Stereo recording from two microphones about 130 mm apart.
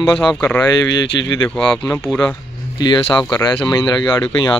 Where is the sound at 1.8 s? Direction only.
20° left (ahead or behind).